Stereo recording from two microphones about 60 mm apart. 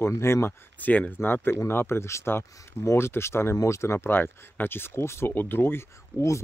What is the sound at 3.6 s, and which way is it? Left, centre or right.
Speech, left.